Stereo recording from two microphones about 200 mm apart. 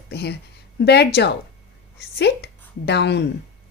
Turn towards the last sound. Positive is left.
turn(degrees=60)  # may be behind; listen again after turning